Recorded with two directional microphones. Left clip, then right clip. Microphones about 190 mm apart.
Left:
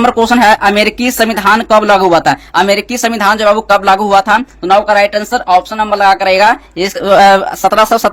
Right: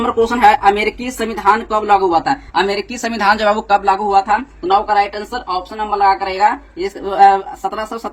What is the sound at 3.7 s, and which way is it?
Speech, 40° left (ahead or behind).